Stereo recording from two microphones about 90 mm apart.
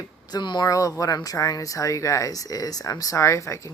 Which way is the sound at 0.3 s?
50° left (ahead or behind).